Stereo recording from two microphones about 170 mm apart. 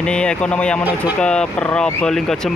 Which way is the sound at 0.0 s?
5° left (ahead or behind).